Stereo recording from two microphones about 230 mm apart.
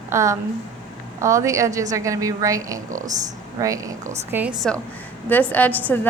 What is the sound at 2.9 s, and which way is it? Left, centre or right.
Speech, right.